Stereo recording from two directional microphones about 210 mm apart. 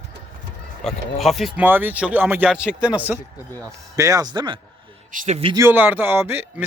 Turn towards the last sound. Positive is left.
turn(degrees=-10)  # may be behind; listen again after turning